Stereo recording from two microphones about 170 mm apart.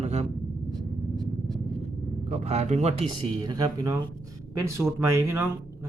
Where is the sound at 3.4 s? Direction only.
25° right (ahead or behind).